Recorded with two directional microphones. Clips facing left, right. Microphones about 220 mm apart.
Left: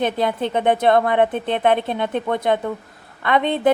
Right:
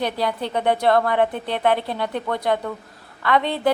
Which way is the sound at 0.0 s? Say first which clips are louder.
Left 3 dB; 20° left (ahead or behind).